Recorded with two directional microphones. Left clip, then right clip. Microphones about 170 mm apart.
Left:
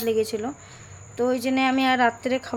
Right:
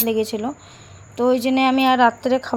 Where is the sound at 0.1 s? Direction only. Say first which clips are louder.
Right 1 dB; 15° right (ahead or behind).